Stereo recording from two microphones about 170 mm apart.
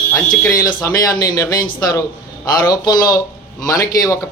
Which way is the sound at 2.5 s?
20° left (ahead or behind).